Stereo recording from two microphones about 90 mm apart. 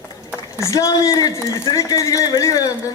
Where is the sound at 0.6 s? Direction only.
35° left (ahead or behind).